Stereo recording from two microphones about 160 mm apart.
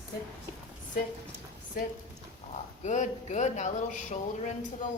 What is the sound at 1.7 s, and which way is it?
Speech, 65° left (ahead or behind).